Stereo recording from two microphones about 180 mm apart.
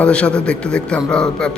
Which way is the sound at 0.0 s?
5° left (ahead or behind).